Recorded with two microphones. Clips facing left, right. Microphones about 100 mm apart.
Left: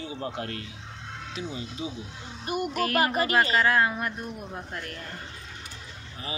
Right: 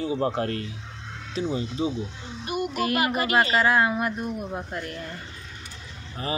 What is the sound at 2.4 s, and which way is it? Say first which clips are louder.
Speech: right 1 dB; 40° left (ahead or behind).